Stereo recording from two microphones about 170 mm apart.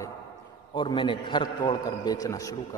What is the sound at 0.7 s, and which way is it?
A man's voice, 25° left (ahead or behind).